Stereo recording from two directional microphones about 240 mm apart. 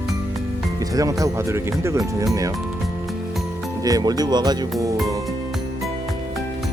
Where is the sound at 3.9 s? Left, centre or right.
Centre.